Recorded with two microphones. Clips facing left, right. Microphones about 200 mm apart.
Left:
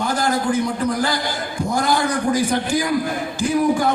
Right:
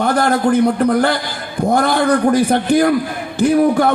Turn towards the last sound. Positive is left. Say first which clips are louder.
# right 5 dB
turn(degrees=-60)  # may be behind; listen again after turning